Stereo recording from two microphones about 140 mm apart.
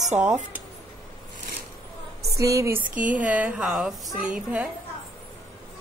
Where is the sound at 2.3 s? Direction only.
25° right (ahead or behind).